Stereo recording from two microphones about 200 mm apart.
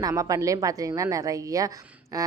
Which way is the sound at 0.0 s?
15° right (ahead or behind).